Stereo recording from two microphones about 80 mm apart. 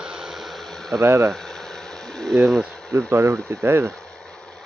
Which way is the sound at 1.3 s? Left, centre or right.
Centre.